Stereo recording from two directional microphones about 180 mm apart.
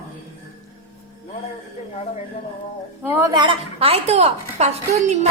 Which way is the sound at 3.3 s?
30° right (ahead or behind).